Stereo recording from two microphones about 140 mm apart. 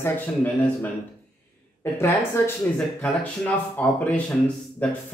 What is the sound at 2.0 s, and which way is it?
Speech, 15° left (ahead or behind).